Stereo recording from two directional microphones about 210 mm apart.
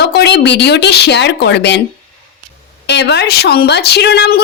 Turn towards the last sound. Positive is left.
turn(degrees=50)  # may be behind; listen again after turning